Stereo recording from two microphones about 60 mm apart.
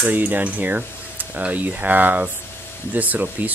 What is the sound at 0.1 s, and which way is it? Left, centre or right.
Speech, right.